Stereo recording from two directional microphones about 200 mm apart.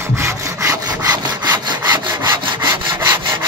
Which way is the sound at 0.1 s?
15° right (ahead or behind).